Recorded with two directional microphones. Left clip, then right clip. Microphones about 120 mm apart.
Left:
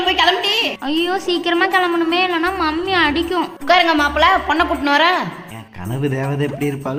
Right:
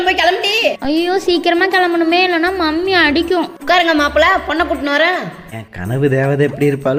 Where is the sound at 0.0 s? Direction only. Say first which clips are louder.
Right 2 dB; 40° right (ahead or behind); by 2.1 s 25° right (ahead or behind).